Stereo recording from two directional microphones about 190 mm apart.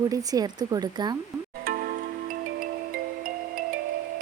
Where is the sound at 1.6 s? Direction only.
50° right (ahead or behind).